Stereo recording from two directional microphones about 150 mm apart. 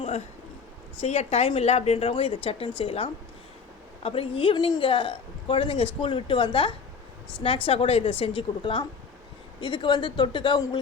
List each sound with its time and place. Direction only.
1.0 s a woman's voice: 45° left (ahead or behind); by 10.8 s 30° left (ahead or behind)